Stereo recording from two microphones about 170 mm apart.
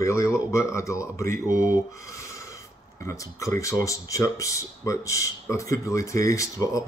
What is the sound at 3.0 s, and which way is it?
Speech, 20° left (ahead or behind).